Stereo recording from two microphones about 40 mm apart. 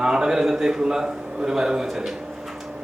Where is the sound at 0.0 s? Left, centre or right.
Centre.